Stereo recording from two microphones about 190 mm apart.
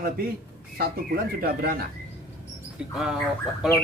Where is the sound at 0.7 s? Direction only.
50° right (ahead or behind).